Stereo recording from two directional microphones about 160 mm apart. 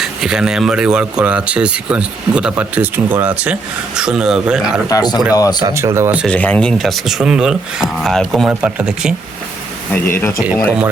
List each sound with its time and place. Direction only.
0.0 s speech: 5° right (ahead or behind)
4.9 s speech: 25° left (ahead or behind)
5.6 s speech: 15° right (ahead or behind)
6.2 s speech: 10° left (ahead or behind)
9.9 s speech: 15° left (ahead or behind)